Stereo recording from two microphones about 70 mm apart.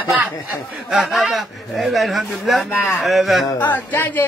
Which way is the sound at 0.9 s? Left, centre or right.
Centre.